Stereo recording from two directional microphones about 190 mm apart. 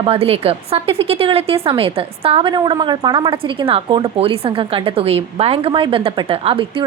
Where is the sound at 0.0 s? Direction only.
30° right (ahead or behind).